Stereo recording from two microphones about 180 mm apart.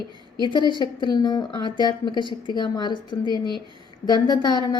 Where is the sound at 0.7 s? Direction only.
25° left (ahead or behind).